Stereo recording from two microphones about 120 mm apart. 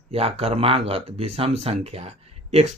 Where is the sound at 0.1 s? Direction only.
60° right (ahead or behind).